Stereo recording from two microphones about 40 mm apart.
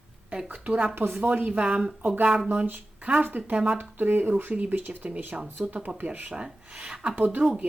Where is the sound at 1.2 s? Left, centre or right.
Right.